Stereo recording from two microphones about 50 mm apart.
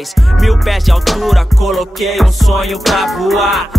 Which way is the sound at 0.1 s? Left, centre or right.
Centre.